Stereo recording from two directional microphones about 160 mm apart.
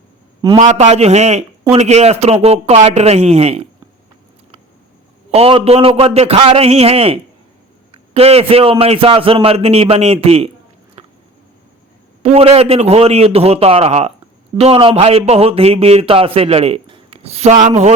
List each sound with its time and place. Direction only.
0.5 s a man's voice: 50° right (ahead or behind)
5.3 s a man's voice: 35° right (ahead or behind)
11.0 s a sound: 35° right (ahead or behind)
12.2 s a man's voice: 40° right (ahead or behind)